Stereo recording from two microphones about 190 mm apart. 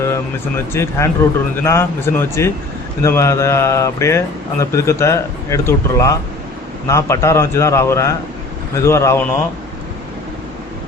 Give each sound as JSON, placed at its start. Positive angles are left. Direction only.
{"t": 0.7, "sound": "speech", "side_deg": 15}